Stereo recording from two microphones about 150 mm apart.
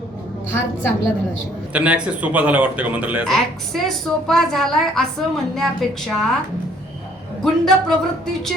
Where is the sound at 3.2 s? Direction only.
Centre (ahead or behind).